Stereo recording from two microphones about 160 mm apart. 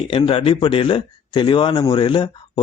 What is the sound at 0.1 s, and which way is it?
Speech, 35° left (ahead or behind).